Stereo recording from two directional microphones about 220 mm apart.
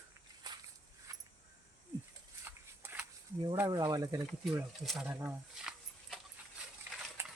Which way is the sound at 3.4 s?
10° right (ahead or behind).